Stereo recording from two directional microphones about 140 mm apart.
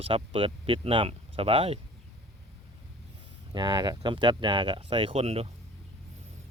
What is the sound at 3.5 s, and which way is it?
Speech, 30° right (ahead or behind).